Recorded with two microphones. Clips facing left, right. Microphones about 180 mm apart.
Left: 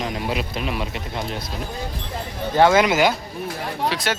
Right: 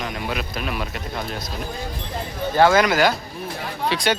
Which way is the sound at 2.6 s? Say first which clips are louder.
Even; 20° left (ahead or behind).